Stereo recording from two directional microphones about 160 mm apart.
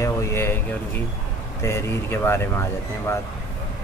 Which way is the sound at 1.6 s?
15° left (ahead or behind).